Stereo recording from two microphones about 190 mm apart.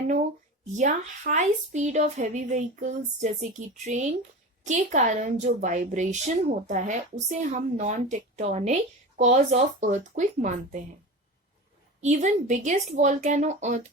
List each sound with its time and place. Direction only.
0.8 s a woman's voice: 40° right (ahead or behind)
12.0 s a woman's voice: 40° right (ahead or behind)